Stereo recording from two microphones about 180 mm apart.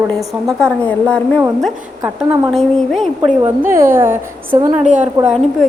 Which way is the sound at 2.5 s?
Centre (ahead or behind).